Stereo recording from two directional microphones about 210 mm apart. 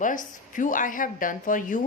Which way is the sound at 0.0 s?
40° left (ahead or behind).